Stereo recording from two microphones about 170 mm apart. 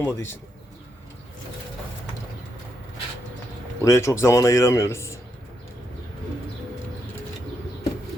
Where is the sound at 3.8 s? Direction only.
15° left (ahead or behind).